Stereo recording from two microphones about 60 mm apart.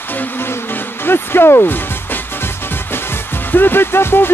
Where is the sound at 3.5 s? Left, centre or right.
Left.